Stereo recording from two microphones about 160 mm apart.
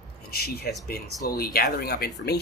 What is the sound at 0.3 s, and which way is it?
Speech, 75° left (ahead or behind).